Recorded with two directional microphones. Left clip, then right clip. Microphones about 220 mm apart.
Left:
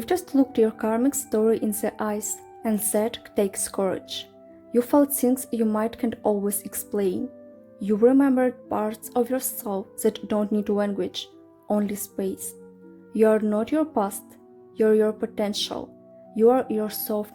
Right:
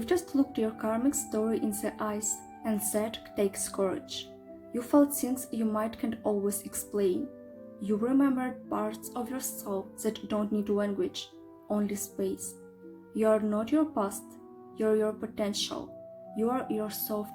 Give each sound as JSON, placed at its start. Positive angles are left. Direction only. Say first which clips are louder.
{"t": 0.0, "sound": "speech", "louder": "left 5 dB", "side_deg": 35}